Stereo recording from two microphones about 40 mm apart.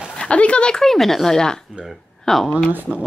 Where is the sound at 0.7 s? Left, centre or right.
Centre.